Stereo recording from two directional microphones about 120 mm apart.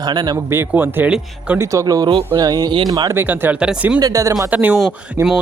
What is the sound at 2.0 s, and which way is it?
Speech, 40° right (ahead or behind).